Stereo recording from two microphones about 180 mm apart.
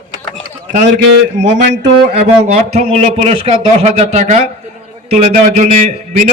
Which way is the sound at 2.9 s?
35° right (ahead or behind).